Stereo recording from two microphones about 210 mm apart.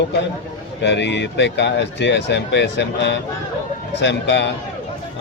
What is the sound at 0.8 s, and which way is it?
Speech, 55° left (ahead or behind).